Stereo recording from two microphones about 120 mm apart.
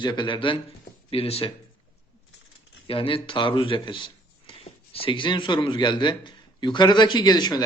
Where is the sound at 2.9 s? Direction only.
50° left (ahead or behind).